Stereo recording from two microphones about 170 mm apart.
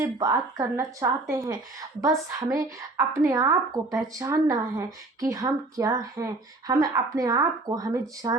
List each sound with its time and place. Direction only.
0.2 s a woman's voice: 20° right (ahead or behind)